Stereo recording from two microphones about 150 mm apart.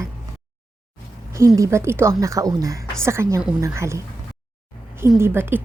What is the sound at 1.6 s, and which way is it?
A woman's voice, 20° right (ahead or behind).